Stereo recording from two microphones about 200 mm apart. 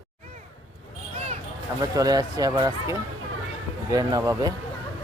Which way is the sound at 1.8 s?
20° right (ahead or behind).